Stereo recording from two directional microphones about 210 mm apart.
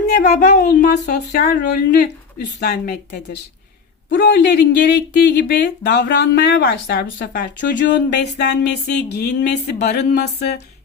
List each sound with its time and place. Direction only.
0.3 s speech: 45° left (ahead or behind)